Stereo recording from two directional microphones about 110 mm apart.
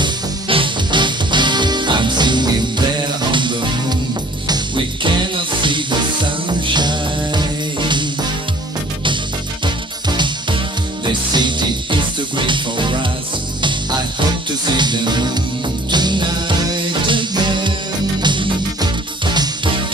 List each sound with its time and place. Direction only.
0.0 s music: 50° right (ahead or behind)
10.0 s music: 45° right (ahead or behind)